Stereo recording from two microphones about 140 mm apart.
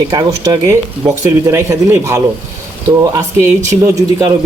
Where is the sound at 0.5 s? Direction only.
20° right (ahead or behind).